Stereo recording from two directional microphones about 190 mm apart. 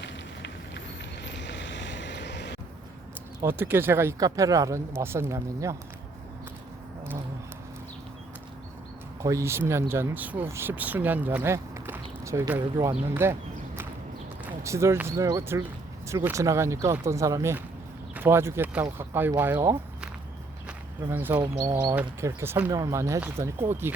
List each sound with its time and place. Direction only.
0.0 s a sound: 70° left (ahead or behind)
1.2 s vehicle: 70° left (ahead or behind)
3.4 s speech: 10° right (ahead or behind)
9.2 s speech: 15° right (ahead or behind)
12.7 s speech: 25° right (ahead or behind)
13.2 s speech: 15° right (ahead or behind)
14.6 s speech: 15° right (ahead or behind)
20.7 s a sound: 10° right (ahead or behind)
21.4 s speech: 20° right (ahead or behind)